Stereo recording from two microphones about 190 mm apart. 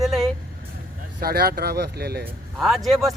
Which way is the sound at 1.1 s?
55° right (ahead or behind).